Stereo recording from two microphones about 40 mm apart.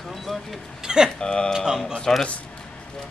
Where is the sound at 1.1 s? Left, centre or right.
Left.